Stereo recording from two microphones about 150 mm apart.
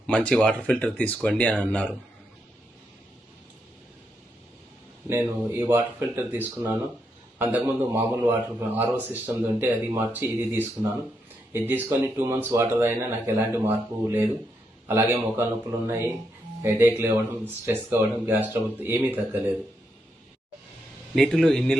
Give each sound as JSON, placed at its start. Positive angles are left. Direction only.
{"t": 0.1, "sound": "speech", "side_deg": 5}
{"t": 5.0, "sound": "a man's voice", "side_deg": -15}
{"t": 21.2, "sound": "a man's voice", "side_deg": 5}